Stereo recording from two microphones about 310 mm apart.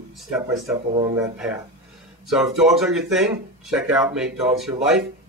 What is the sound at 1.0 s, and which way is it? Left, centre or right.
Speech, centre.